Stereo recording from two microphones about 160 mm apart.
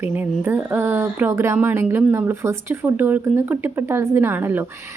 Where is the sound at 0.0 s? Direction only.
10° right (ahead or behind).